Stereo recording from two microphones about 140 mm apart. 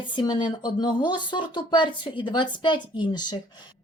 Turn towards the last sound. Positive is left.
turn(degrees=30)  # may be behind; listen again after turning